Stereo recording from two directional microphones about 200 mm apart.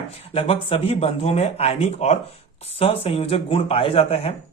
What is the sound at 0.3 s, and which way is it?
Speech, 30° left (ahead or behind).